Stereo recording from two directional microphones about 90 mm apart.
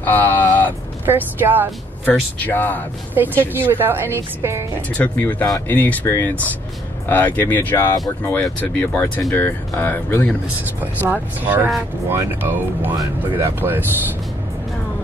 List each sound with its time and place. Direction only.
0.0 s speech: 20° left (ahead or behind)
0.7 s speech: 20° right (ahead or behind)
2.0 s speech: 20° left (ahead or behind)
3.2 s a woman's voice: 20° right (ahead or behind)
4.9 s speech: 20° left (ahead or behind)
10.8 s a woman's voice: 20° right (ahead or behind)